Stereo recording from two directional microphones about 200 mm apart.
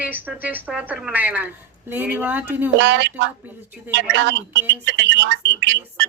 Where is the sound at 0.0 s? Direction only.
10° right (ahead or behind).